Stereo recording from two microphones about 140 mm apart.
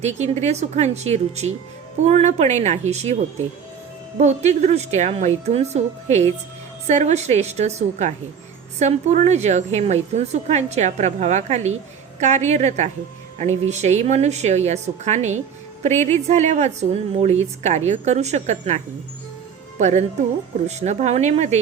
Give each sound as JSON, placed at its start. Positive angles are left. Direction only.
{"t": 0.4, "sound": "a woman's voice", "side_deg": -50}
{"t": 4.2, "sound": "a woman's voice", "side_deg": -55}
{"t": 19.8, "sound": "a woman's voice", "side_deg": -55}